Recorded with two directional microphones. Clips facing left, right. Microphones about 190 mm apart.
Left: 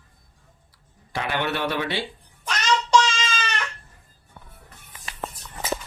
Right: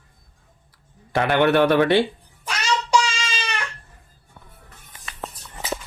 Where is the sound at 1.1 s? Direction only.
55° right (ahead or behind).